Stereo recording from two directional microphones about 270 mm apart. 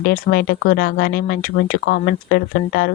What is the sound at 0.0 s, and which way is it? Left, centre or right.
Speech, left.